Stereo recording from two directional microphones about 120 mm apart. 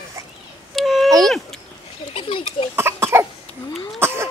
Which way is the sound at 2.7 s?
20° right (ahead or behind).